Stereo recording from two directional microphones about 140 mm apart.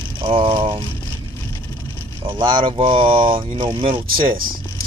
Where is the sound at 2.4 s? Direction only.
35° right (ahead or behind).